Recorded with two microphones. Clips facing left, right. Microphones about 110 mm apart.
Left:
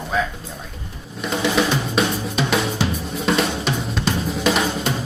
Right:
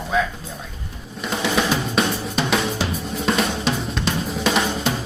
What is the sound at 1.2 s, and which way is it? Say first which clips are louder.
Drum: left 2 dB; centre (ahead or behind).